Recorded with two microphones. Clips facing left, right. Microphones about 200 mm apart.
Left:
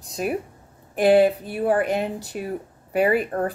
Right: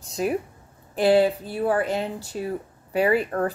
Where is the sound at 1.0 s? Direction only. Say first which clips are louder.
Left 2 dB; 15° left (ahead or behind).